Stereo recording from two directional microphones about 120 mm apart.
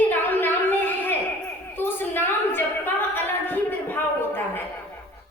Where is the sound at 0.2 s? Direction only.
15° left (ahead or behind).